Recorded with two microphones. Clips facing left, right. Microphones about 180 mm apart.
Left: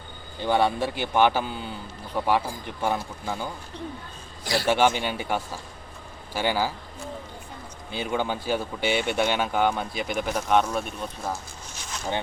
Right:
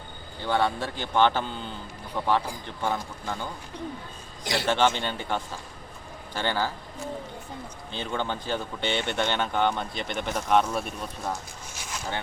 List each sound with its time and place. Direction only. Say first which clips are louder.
0.3 s speech: left 3 dB; 15° left (ahead or behind)
4.4 s a man's voice: left 2 dB; 20° right (ahead or behind)
4.7 s speech: left 2 dB; 10° left (ahead or behind)
7.9 s speech: left 3 dB; 10° left (ahead or behind)